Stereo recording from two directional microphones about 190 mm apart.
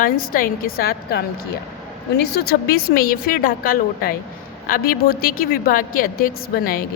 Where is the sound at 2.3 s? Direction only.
50° left (ahead or behind).